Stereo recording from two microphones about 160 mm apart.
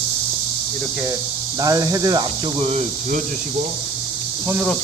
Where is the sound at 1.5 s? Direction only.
20° right (ahead or behind); by 2.8 s 40° right (ahead or behind).